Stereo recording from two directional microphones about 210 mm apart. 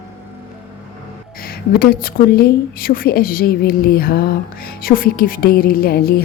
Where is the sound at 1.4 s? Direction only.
45° left (ahead or behind).